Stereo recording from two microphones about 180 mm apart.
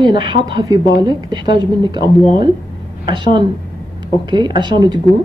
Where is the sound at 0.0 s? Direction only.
25° right (ahead or behind).